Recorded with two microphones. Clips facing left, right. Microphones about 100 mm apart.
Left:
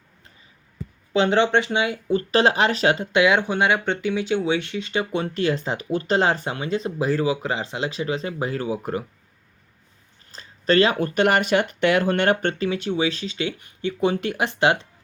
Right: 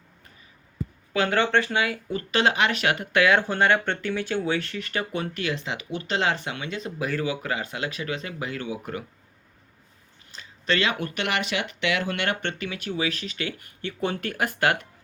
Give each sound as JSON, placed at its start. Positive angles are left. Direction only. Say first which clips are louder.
{"t": 1.1, "sound": "speech", "louder": "left 4 dB", "side_deg": 25}
{"t": 10.3, "sound": "speech", "louder": "left 7 dB", "side_deg": 40}